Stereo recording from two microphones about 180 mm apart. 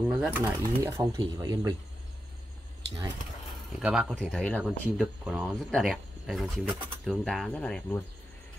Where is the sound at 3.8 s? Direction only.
5° right (ahead or behind).